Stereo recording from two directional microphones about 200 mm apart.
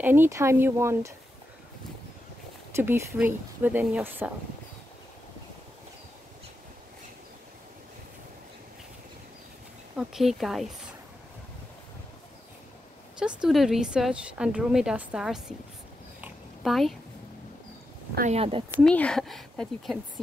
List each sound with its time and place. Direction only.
0.0 s speech: 10° right (ahead or behind)
2.7 s speech: 10° right (ahead or behind)
9.9 s speech: centre (ahead or behind)
13.2 s speech: centre (ahead or behind)
16.2 s a sound: 5° right (ahead or behind)
18.1 s speech: 35° right (ahead or behind)
18.9 s speech: 5° left (ahead or behind)